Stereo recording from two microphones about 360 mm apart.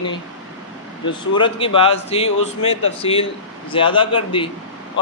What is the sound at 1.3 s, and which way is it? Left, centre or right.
A man's voice, centre.